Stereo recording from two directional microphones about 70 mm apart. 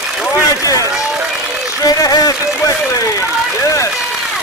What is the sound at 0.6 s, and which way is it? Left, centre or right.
Run, left.